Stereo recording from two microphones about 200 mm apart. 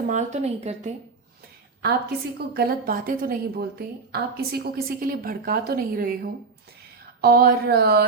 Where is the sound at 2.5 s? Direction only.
50° right (ahead or behind).